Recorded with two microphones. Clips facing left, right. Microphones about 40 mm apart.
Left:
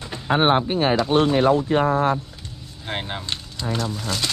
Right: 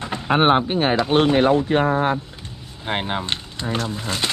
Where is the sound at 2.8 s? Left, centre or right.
Right.